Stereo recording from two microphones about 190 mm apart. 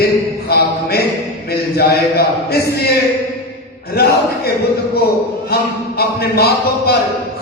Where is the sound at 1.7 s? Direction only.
55° left (ahead or behind).